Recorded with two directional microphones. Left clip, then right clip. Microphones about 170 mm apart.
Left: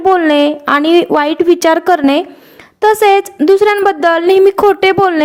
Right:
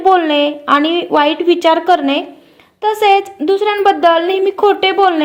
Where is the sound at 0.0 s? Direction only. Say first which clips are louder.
Left 1 dB; 35° left (ahead or behind).